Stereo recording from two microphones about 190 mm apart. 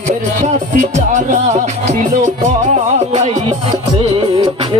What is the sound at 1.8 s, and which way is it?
Music, 40° right (ahead or behind).